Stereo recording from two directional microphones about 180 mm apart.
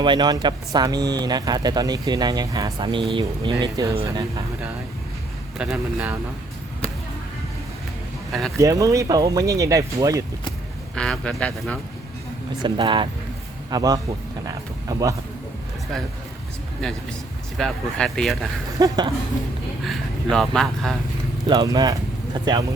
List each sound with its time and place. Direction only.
0.0 s speech: 25° right (ahead or behind)
5.5 s speech: 5° right (ahead or behind)
8.3 s speech: centre (ahead or behind)
8.5 s speech: 15° right (ahead or behind)
10.9 s speech: 5° left (ahead or behind)
12.6 s speech: 25° right (ahead or behind)
14.4 s a sound: 20° right (ahead or behind)
16.8 s speech: 5° left (ahead or behind)
18.8 s speech: 25° right (ahead or behind)
20.3 s speech: centre (ahead or behind)
21.4 s speech: 25° right (ahead or behind)